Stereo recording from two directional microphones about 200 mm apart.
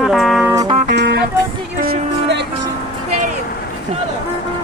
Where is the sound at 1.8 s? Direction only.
55° right (ahead or behind).